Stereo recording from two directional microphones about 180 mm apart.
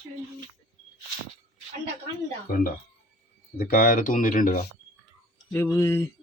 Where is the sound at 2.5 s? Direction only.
55° left (ahead or behind).